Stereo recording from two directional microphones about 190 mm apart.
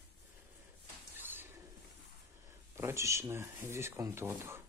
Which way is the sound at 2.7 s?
15° right (ahead or behind).